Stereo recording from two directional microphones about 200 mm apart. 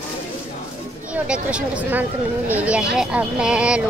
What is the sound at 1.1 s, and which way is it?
A woman's voice, 5° right (ahead or behind).